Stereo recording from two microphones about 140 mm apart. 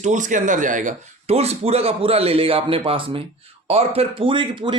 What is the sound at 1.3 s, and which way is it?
Speech, 45° right (ahead or behind).